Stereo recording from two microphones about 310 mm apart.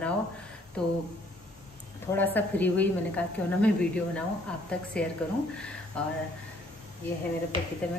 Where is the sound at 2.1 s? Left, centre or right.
Centre.